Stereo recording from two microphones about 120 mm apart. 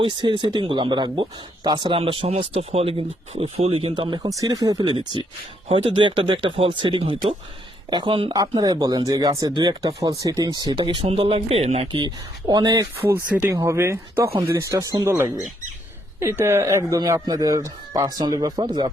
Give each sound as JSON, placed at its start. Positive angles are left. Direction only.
{"t": 0.0, "sound": "speech", "side_deg": -40}
{"t": 4.2, "sound": "speech", "side_deg": -30}
{"t": 5.6, "sound": "speech", "side_deg": -50}
{"t": 8.3, "sound": "speech", "side_deg": -35}
{"t": 11.9, "sound": "speech", "side_deg": -35}
{"t": 13.0, "sound": "speech", "side_deg": -15}